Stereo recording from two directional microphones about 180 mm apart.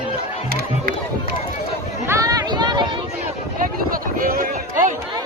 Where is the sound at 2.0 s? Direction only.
20° right (ahead or behind).